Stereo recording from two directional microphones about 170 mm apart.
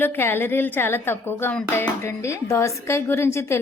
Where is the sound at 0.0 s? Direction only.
15° left (ahead or behind).